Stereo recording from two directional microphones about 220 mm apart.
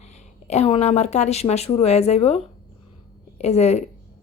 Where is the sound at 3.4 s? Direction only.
30° left (ahead or behind).